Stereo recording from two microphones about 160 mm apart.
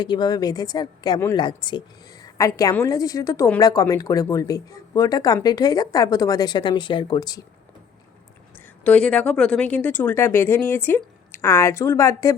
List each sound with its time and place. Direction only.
0.0 s a woman's voice: 25° left (ahead or behind)
8.5 s speech: 10° left (ahead or behind)